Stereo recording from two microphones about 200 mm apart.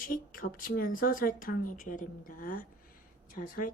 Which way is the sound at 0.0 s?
45° left (ahead or behind).